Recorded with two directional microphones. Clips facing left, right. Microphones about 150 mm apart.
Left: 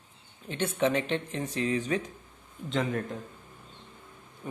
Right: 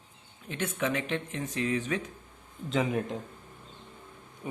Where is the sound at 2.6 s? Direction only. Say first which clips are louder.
Right 1 dB; 5° right (ahead or behind).